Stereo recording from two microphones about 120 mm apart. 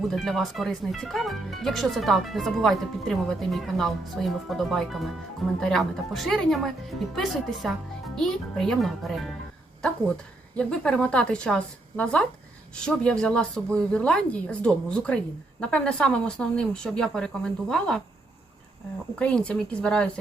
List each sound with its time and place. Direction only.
0.1 s speech: centre (ahead or behind)
10.6 s a woman's voice: 5° left (ahead or behind)
19.2 s a woman's voice: 10° left (ahead or behind)